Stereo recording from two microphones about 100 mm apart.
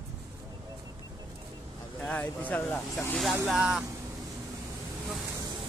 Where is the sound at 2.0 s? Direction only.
15° left (ahead or behind).